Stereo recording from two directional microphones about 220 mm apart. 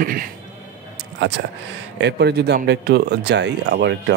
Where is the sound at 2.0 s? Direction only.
50° right (ahead or behind).